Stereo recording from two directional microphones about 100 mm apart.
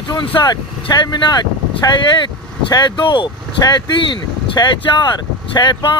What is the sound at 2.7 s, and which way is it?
Speech, 45° left (ahead or behind).